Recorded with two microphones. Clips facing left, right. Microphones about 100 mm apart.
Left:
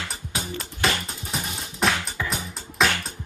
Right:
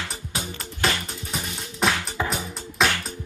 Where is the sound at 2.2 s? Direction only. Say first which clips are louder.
Right 6 dB; 30° right (ahead or behind).